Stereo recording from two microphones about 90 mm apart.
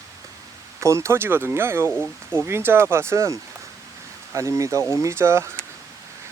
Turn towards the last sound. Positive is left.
turn(degrees=-30)  # may be behind; listen again after turning